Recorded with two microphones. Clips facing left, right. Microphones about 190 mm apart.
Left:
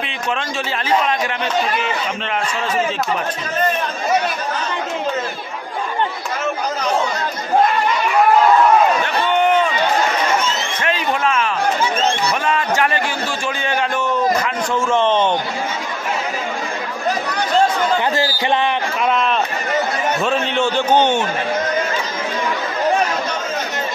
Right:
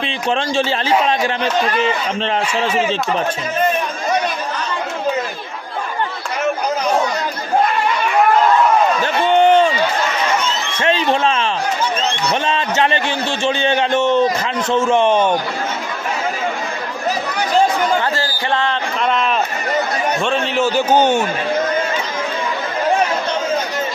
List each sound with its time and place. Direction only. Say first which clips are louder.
0.3 s speech: right 6 dB; 30° right (ahead or behind)
9.0 s run: right 4 dB; 30° right (ahead or behind)
10.8 s a sound: right 5 dB; 30° right (ahead or behind)
14.7 s a man's voice: right 3 dB; 20° right (ahead or behind)
18.1 s a sound: left 2 dB; 15° left (ahead or behind)
19.0 s run: even; centre (ahead or behind)
20.2 s a man's voice: right 1 dB; centre (ahead or behind)